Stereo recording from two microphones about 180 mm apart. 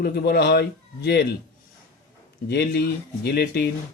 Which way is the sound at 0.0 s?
65° left (ahead or behind).